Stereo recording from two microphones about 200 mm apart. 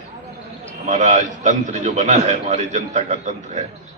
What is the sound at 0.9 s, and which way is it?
A man's voice, 40° right (ahead or behind).